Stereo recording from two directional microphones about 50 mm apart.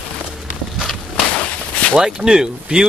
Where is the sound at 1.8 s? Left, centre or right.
Left.